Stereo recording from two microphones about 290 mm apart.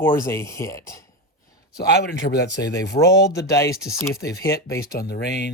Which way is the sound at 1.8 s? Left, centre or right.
Left.